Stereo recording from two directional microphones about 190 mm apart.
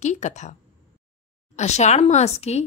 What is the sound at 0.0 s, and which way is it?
Speech, 40° left (ahead or behind).